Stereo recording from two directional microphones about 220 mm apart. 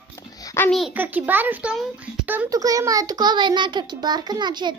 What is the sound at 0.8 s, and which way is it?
A child's voice, 10° right (ahead or behind).